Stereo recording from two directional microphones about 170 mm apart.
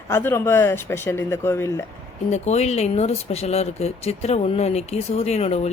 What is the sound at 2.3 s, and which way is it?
Speech, 40° left (ahead or behind).